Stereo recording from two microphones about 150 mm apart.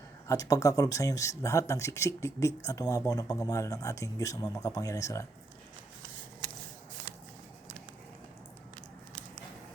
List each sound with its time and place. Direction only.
0.3 s speech: 25° left (ahead or behind)